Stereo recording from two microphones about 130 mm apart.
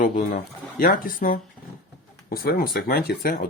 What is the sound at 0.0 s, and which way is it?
Speech, 90° left.